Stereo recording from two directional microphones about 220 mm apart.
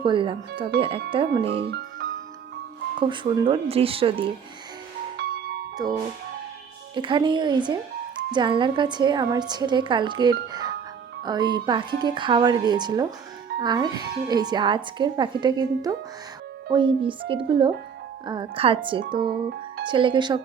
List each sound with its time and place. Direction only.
0.0 s speech: 20° right (ahead or behind)
3.0 s speech: 20° right (ahead or behind)
5.8 s speech: 20° right (ahead or behind)